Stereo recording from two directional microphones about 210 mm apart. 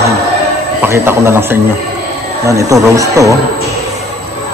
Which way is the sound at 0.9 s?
10° right (ahead or behind).